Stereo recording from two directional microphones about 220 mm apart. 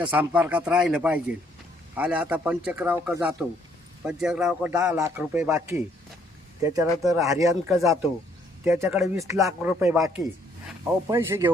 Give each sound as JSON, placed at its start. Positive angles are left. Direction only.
{"t": 0.1, "sound": "speech", "side_deg": -5}
{"t": 11.1, "sound": "speech", "side_deg": -10}